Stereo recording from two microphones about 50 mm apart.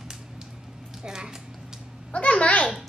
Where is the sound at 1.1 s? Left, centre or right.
Centre.